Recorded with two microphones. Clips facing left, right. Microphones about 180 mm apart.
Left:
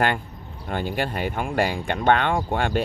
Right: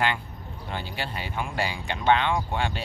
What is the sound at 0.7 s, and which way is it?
Speech, 50° left (ahead or behind).